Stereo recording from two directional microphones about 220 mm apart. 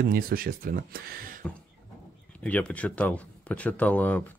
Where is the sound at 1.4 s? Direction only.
5° left (ahead or behind).